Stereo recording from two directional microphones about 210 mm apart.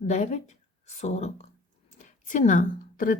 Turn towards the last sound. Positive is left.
turn(degrees=40)  # may be behind; listen again after turning